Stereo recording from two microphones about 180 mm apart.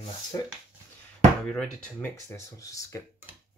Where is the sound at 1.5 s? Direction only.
5° left (ahead or behind).